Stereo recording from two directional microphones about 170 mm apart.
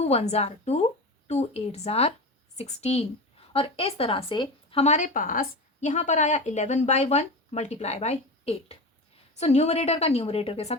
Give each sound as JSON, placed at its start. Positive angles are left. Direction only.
{"t": 0.0, "sound": "speech", "side_deg": 40}